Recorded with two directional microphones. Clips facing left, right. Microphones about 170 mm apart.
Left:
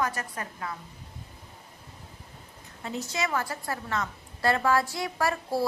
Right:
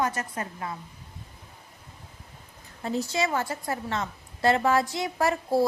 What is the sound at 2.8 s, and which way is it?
A woman's voice, 30° right (ahead or behind).